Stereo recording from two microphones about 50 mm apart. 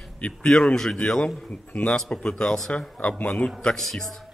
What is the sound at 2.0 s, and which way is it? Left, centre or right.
Speech, centre.